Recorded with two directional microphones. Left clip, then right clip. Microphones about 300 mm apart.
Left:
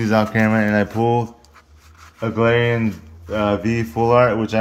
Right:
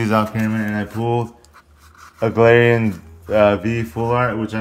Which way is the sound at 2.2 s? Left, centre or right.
Centre.